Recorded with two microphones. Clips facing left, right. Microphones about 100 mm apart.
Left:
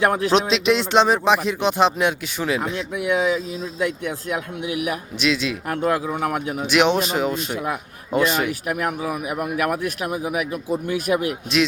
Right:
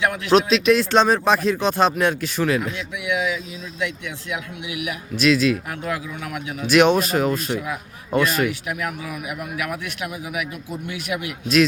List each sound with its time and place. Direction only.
0.0 s a man's voice: 40° left (ahead or behind)
0.3 s speech: 25° left (ahead or behind)
2.9 s a man's voice: 40° left (ahead or behind)
5.1 s speech: 20° left (ahead or behind)
5.9 s a man's voice: 40° left (ahead or behind)
6.6 s speech: 15° left (ahead or behind)
8.6 s a man's voice: 40° left (ahead or behind)